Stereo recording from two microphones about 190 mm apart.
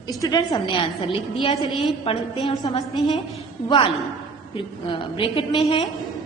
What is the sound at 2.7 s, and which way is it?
A woman's voice, 25° left (ahead or behind).